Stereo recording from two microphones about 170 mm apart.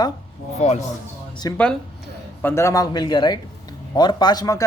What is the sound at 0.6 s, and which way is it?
Speech, 40° left (ahead or behind).